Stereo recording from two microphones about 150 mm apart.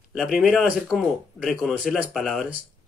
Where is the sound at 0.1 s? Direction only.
5° right (ahead or behind).